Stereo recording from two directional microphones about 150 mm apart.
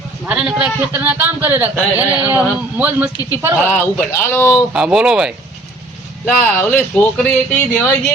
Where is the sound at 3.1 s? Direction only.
25° left (ahead or behind).